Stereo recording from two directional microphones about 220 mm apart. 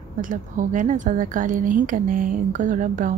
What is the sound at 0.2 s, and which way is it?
Speech, 35° right (ahead or behind).